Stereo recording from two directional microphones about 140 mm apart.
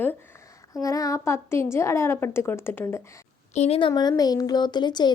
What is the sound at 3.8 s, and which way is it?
Speech, 35° left (ahead or behind).